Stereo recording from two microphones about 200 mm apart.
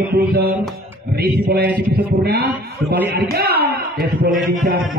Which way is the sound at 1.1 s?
55° right (ahead or behind).